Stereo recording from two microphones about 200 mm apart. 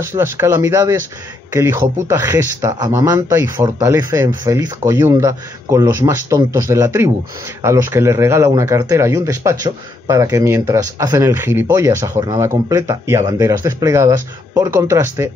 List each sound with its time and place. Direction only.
0.4 s speech: 15° right (ahead or behind)